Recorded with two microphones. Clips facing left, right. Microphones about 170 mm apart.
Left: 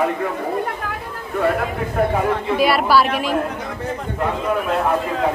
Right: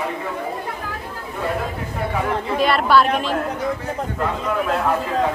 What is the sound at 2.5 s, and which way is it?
Speech, 5° left (ahead or behind).